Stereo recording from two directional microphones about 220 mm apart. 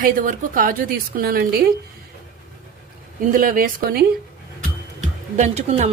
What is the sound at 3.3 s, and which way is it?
Speech, 40° right (ahead or behind).